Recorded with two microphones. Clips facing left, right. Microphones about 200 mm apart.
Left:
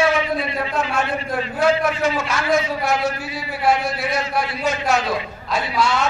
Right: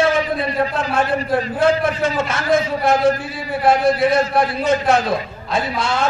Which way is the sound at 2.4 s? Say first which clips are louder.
Right 4 dB; 50° right (ahead or behind).